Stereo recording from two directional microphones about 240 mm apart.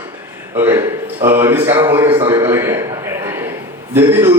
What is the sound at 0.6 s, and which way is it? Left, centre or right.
A man's voice, centre.